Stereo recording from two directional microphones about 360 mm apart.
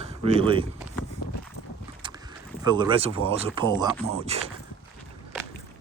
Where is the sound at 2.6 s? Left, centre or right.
Centre.